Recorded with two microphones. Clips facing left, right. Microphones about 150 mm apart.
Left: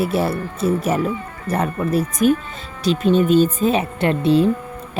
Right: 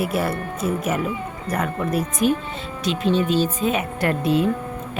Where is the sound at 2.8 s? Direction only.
40° left (ahead or behind).